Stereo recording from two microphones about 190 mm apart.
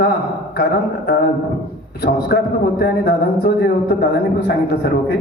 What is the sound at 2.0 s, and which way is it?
A man's voice, 55° left (ahead or behind).